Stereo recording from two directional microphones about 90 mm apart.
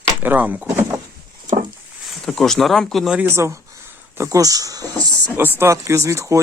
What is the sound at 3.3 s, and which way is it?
Speech, 30° right (ahead or behind).